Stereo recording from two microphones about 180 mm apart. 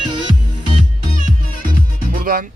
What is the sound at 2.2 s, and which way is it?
Music, 55° right (ahead or behind).